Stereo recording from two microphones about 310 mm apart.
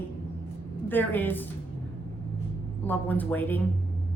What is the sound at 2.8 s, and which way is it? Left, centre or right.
Speech, centre.